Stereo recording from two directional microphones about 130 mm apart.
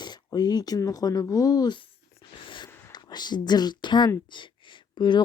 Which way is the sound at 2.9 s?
35° left (ahead or behind).